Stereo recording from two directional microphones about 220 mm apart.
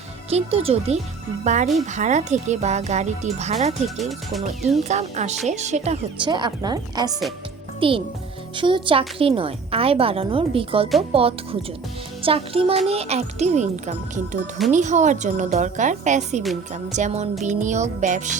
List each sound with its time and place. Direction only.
0.3 s a woman's voice: 25° right (ahead or behind)
3.8 s speech: centre (ahead or behind)
4.8 s a woman's voice: 30° right (ahead or behind)